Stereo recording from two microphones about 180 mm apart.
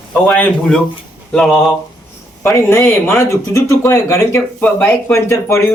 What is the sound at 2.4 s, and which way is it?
Speech, 15° left (ahead or behind).